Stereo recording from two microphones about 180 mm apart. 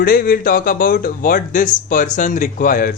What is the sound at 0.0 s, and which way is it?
Speech, 50° left (ahead or behind).